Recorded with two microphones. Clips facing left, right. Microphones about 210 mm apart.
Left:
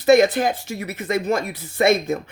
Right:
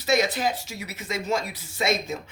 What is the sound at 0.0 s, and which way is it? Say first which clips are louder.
Speech: left 9 dB; 55° left (ahead or behind).